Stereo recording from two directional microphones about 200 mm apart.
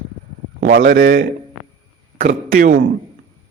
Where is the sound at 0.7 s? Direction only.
55° right (ahead or behind).